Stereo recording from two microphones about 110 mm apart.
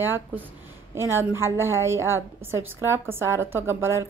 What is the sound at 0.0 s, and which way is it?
A woman's voice, 15° right (ahead or behind).